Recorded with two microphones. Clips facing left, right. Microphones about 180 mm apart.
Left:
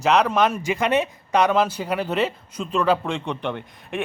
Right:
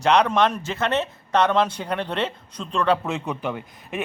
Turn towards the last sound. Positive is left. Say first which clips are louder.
# left 1 dB
turn(degrees=-5)  # may be behind; listen again after turning